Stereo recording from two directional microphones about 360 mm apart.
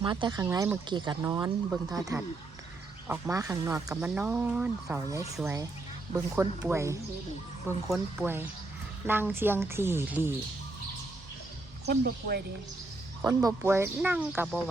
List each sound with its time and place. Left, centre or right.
0.0 s speech: centre
11.9 s speech: right
13.2 s speech: centre